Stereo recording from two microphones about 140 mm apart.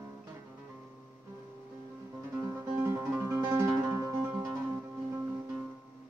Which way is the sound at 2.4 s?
20° right (ahead or behind).